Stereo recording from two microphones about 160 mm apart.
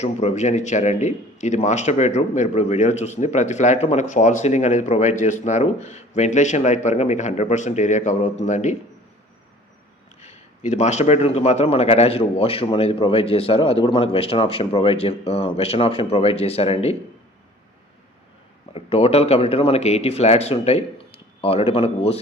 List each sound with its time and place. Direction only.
0.0 s a man's voice: 45° left (ahead or behind)
10.2 s speech: 45° left (ahead or behind)
18.7 s speech: 40° left (ahead or behind)